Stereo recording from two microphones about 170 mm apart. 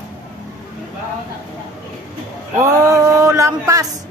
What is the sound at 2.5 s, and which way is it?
A woman's voice, 20° right (ahead or behind).